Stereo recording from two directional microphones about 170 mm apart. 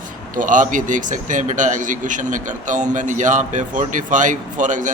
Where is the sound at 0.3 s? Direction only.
50° right (ahead or behind).